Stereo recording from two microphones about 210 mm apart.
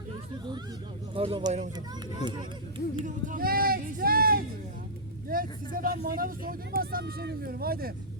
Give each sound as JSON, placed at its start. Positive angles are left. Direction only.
{"t": 1.1, "sound": "a man's voice", "side_deg": -25}
{"t": 3.0, "sound": "speech", "side_deg": -40}